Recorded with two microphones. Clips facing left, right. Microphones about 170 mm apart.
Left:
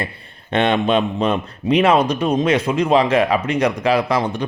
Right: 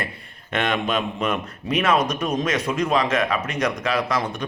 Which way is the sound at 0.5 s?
30° left (ahead or behind).